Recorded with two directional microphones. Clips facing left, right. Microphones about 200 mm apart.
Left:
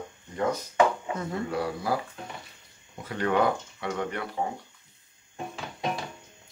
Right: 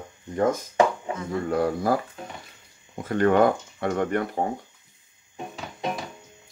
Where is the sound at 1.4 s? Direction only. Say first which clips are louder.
Right 8 dB; 50° right (ahead or behind).